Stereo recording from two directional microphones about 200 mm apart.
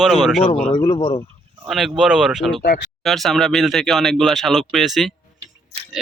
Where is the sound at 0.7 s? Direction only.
20° left (ahead or behind).